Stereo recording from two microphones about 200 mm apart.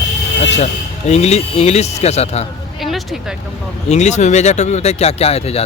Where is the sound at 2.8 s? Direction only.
Centre (ahead or behind).